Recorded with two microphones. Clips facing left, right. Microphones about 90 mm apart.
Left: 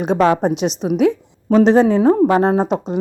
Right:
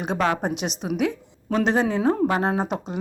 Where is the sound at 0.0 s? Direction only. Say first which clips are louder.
Left 8 dB; 35° left (ahead or behind).